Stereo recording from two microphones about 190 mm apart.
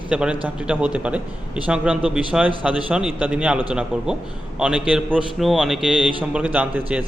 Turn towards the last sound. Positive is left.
turn(degrees=-5)  # may be behind; listen again after turning